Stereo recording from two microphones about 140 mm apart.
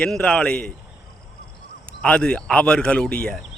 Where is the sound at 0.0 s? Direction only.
5° left (ahead or behind).